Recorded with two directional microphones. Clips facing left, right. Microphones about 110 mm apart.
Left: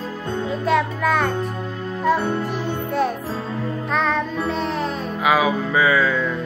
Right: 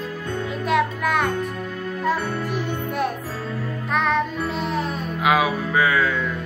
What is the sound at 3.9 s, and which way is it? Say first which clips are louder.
Music: right 1 dB; 5° right (ahead or behind).